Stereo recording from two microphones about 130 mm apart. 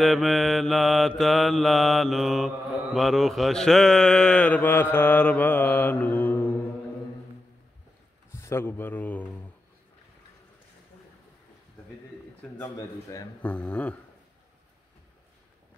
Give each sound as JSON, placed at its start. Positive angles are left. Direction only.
{"t": 0.0, "sound": "mantra", "side_deg": 0}
{"t": 8.3, "sound": "speech", "side_deg": 20}
{"t": 13.4, "sound": "speech", "side_deg": 10}